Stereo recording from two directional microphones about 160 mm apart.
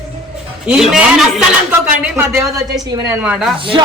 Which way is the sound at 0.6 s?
5° right (ahead or behind).